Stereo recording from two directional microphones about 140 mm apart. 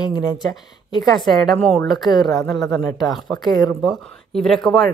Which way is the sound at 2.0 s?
30° left (ahead or behind).